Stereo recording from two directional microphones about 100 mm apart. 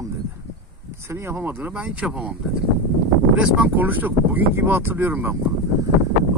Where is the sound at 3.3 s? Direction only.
10° right (ahead or behind).